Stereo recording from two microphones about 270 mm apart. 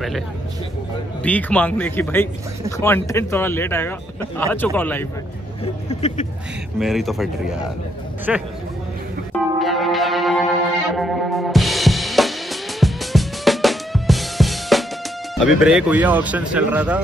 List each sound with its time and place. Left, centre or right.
1.2 s speech: centre
5.9 s a sound: left
6.8 s speech: centre
9.6 s music: centre
15.3 s speech: centre